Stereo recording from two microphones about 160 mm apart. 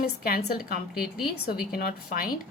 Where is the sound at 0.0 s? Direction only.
70° left (ahead or behind).